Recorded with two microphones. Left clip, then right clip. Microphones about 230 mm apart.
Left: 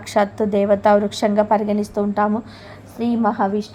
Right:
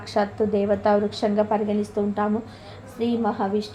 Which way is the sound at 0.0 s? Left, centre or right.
Left.